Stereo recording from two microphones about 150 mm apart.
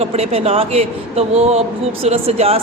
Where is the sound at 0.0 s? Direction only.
45° right (ahead or behind).